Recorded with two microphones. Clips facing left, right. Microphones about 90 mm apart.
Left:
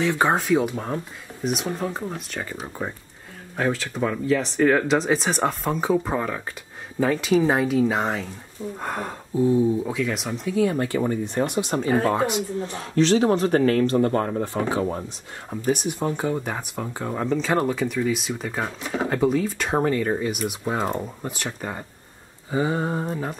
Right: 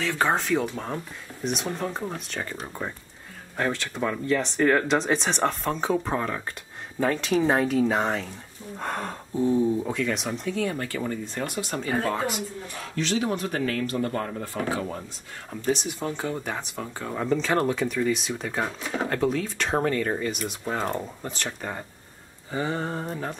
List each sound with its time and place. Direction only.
0.0 s speech: 15° left (ahead or behind)
0.9 s speech: centre (ahead or behind); by 12.7 s 20° left (ahead or behind)
12.9 s speech: 35° left (ahead or behind)
14.4 s speech: 20° left (ahead or behind)
15.5 s speech: 10° left (ahead or behind)
17.2 s speech: centre (ahead or behind)